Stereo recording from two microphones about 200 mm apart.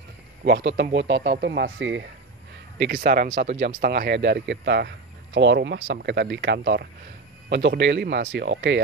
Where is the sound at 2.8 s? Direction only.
45° right (ahead or behind).